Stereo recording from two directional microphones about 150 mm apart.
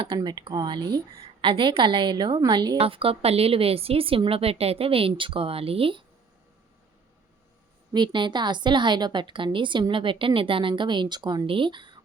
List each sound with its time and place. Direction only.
0.2 s a woman's voice: 30° right (ahead or behind)
7.9 s a woman's voice: 30° right (ahead or behind)